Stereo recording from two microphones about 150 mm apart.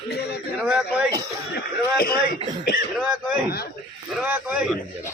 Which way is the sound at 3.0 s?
5° right (ahead or behind).